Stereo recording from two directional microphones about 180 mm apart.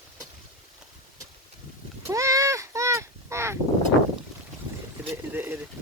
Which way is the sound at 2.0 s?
15° right (ahead or behind).